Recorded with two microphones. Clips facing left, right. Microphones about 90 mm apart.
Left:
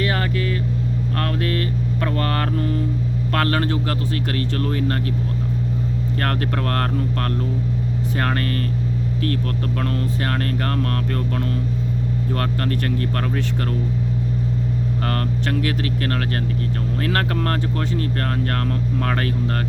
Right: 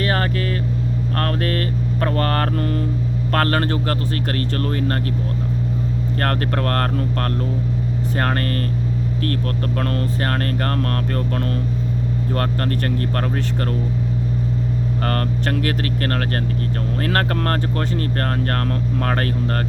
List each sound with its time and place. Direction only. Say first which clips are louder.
0.0 s vehicle: right 1 dB; 45° right (ahead or behind)
1.1 s speech: right 2 dB; 45° right (ahead or behind)
6.1 s speech: right 2 dB; 45° right (ahead or behind)
15.0 s speech: right 3 dB; 45° right (ahead or behind)